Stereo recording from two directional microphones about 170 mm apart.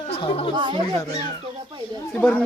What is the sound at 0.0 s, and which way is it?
Chatter, 35° left (ahead or behind).